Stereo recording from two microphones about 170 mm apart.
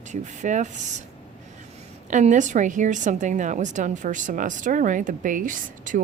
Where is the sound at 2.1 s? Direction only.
45° right (ahead or behind).